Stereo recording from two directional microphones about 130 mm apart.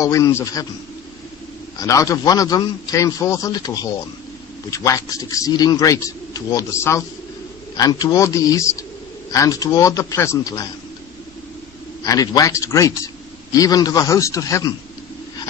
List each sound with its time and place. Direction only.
0.0 s a man's voice: 25° left (ahead or behind)
1.8 s a man's voice: 25° left (ahead or behind)
12.0 s a man's voice: 30° left (ahead or behind)